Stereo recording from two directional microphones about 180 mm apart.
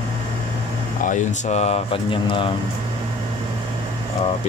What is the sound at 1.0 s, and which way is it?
Speech, 40° left (ahead or behind).